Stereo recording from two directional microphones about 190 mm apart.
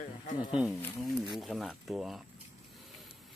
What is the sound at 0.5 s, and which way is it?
Speech, 5° right (ahead or behind).